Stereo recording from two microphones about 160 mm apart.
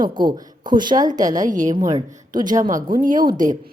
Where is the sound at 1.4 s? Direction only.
55° right (ahead or behind).